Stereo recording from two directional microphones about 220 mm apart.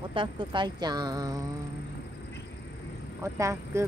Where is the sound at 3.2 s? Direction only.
15° right (ahead or behind).